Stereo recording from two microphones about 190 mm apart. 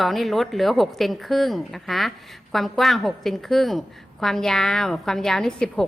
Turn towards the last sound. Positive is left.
turn(degrees=5)  # may be behind; listen again after turning